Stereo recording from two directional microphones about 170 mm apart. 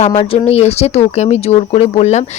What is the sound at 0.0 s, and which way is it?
Speech, 40° left (ahead or behind).